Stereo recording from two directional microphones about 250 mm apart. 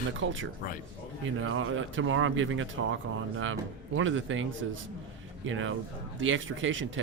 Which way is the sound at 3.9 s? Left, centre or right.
Right.